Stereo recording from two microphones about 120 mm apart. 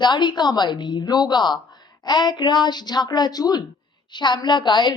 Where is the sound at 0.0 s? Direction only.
40° left (ahead or behind).